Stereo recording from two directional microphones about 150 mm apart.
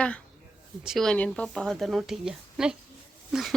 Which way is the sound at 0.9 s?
5° left (ahead or behind).